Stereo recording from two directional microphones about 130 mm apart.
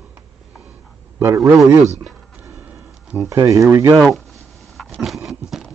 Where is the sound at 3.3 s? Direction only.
25° right (ahead or behind).